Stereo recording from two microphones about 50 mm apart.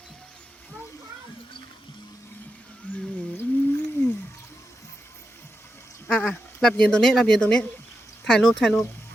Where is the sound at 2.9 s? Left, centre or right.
Left.